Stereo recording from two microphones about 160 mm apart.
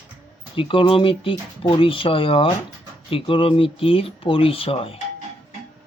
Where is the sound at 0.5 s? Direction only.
35° left (ahead or behind).